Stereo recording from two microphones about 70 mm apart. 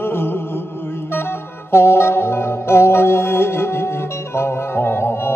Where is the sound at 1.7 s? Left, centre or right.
Left.